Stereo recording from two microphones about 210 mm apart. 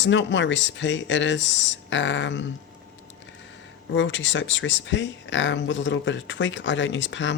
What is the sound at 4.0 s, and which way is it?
Speech, 60° left (ahead or behind).